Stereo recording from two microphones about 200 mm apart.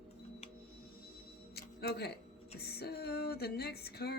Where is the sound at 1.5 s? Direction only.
55° left (ahead or behind).